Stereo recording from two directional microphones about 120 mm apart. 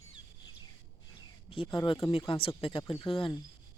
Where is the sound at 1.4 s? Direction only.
50° left (ahead or behind).